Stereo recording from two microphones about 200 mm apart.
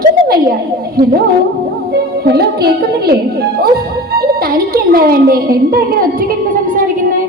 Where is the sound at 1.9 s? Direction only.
50° right (ahead or behind).